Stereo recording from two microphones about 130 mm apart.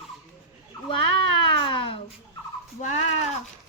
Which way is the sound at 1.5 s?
40° left (ahead or behind).